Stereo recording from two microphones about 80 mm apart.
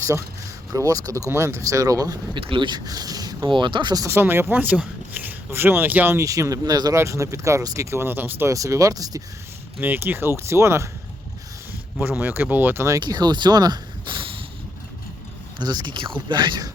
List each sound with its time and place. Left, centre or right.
0.0 s speech: right
1.3 s speech: right
2.3 s speech: right
2.8 s speech: right
3.5 s speech: right
3.9 s speech: right
4.2 s speech: right
6.1 s speech: right
6.9 s speech: right
8.4 s speech: right
9.8 s speech: right
11.9 s speech: centre
13.0 s speech: right
15.5 s speech: right